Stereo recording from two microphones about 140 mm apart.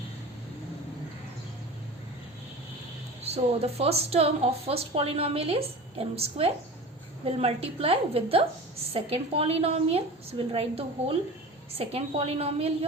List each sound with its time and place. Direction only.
3.2 s a woman's voice: 45° right (ahead or behind)